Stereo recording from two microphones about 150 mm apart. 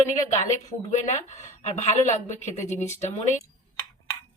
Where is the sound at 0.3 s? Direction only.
55° left (ahead or behind).